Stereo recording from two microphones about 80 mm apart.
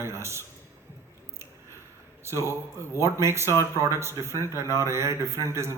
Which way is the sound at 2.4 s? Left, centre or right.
Left.